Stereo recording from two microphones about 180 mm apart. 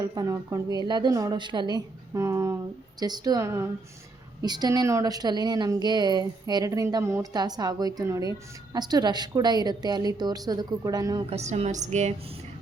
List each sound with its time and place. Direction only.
0.1 s speech: 20° right (ahead or behind)
11.3 s a woman's voice: 35° right (ahead or behind)